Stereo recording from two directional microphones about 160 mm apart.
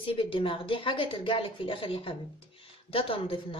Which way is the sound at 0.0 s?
35° left (ahead or behind).